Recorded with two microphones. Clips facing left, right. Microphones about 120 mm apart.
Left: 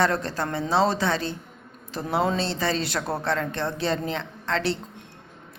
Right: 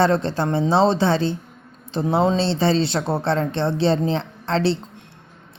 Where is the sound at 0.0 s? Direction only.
30° right (ahead or behind).